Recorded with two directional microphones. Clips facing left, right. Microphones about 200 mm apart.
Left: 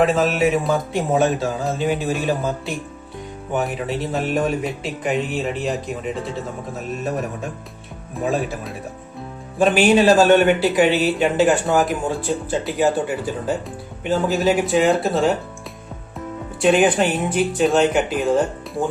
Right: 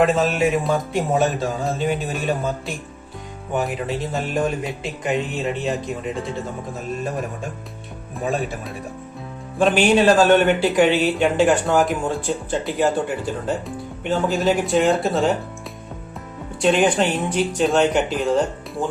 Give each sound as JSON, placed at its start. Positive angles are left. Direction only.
{"t": 0.0, "sound": "speech", "side_deg": 0}
{"t": 8.1, "sound": "speech", "side_deg": 0}
{"t": 16.6, "sound": "speech", "side_deg": 5}